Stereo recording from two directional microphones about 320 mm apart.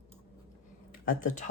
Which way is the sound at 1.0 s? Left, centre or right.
Left.